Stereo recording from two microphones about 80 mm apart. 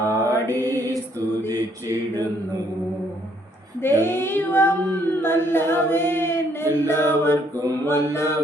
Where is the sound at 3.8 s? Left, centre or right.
Left.